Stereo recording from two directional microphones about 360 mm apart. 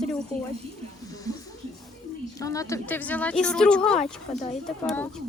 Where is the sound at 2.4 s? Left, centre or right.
Centre.